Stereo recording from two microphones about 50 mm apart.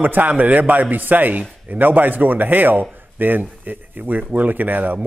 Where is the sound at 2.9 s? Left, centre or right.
Right.